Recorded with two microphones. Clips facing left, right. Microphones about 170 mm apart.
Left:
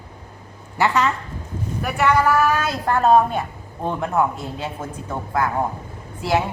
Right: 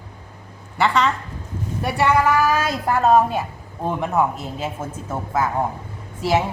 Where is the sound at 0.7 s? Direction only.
5° left (ahead or behind).